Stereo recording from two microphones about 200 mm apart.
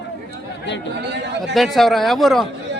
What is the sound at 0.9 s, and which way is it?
Speech, 60° right (ahead or behind).